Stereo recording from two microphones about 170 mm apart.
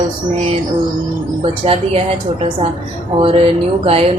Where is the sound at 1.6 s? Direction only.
35° right (ahead or behind).